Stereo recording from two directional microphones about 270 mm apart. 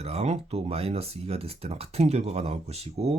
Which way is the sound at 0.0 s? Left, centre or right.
Right.